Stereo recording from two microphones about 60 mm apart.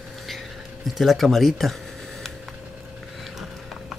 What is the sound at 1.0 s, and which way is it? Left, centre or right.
Speech, centre.